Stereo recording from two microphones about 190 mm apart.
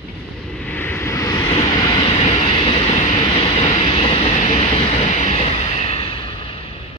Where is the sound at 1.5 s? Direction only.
30° left (ahead or behind).